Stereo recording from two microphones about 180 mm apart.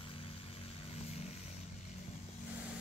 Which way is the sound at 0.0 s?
30° left (ahead or behind).